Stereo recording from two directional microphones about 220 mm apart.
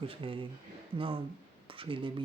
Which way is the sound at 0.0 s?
25° right (ahead or behind).